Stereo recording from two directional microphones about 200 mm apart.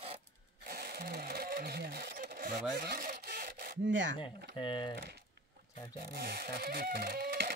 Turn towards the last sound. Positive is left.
turn(degrees=-50)  # may be behind; listen again after turning